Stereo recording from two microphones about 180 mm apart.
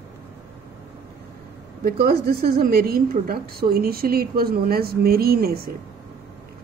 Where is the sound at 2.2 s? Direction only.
60° right (ahead or behind).